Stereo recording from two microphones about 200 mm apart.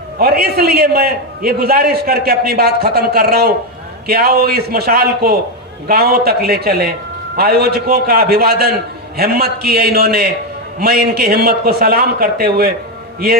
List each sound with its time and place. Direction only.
0.2 s a man's voice: 50° right (ahead or behind)